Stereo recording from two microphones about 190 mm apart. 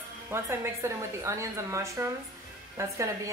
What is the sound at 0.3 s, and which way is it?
A woman's voice, 15° right (ahead or behind).